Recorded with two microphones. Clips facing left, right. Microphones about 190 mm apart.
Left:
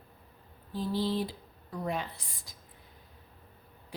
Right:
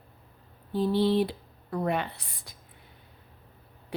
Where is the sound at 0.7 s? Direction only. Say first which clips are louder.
Right 7 dB; 65° right (ahead or behind).